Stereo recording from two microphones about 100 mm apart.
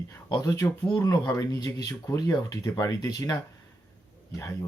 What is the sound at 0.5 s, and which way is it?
Speech, 25° left (ahead or behind).